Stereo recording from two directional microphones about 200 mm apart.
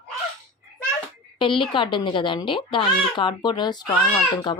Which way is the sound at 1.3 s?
25° left (ahead or behind).